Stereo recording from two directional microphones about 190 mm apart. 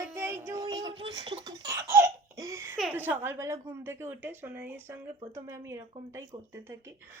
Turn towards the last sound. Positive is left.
turn(degrees=-15)  # may be behind; listen again after turning